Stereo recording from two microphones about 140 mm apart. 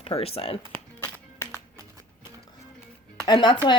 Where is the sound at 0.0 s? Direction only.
45° left (ahead or behind).